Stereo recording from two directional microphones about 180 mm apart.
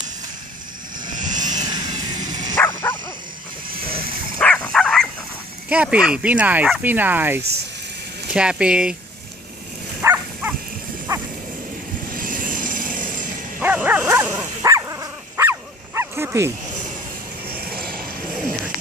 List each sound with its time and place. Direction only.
1.1 s vehicle: 45° right (ahead or behind)
1.5 s dog: 20° right (ahead or behind)
2.6 s bow-wow: 15° left (ahead or behind)
4.4 s dog: 10° left (ahead or behind)
5.6 s speech: 5° right (ahead or behind)
10.0 s livestock: 10° right (ahead or behind)
11.1 s bow-wow: 20° right (ahead or behind)
12.1 s vehicle: 50° right (ahead or behind)
13.6 s dog: 10° right (ahead or behind)
17.7 s vehicle: 55° right (ahead or behind)